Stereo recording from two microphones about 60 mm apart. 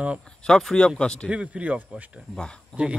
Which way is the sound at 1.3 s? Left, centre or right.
Centre.